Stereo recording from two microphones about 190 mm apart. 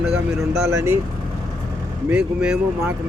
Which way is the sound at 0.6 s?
15° right (ahead or behind).